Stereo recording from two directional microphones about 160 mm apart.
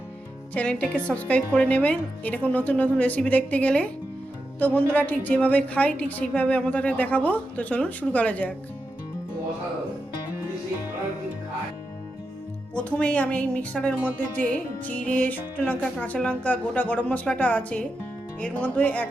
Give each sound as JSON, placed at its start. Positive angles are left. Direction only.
{"t": 0.5, "sound": "a woman's voice", "side_deg": 5}
{"t": 12.7, "sound": "a woman's voice", "side_deg": 10}